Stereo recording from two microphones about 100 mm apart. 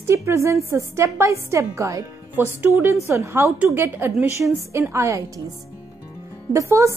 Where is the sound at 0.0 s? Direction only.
30° right (ahead or behind).